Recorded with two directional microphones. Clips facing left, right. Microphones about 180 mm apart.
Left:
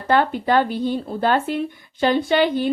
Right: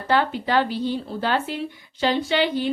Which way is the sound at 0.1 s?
50° left (ahead or behind).